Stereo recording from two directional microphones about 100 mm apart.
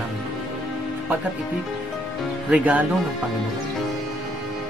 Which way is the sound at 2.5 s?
15° right (ahead or behind).